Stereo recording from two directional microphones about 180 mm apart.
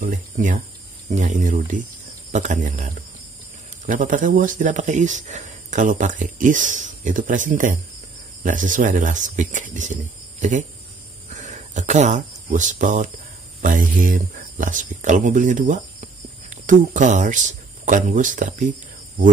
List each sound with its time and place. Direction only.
0.0 s speech: 50° right (ahead or behind)
11.2 s speech: 40° right (ahead or behind)